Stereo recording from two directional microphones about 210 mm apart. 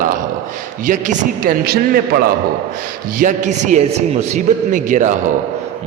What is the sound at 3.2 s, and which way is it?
A man's voice, 35° right (ahead or behind).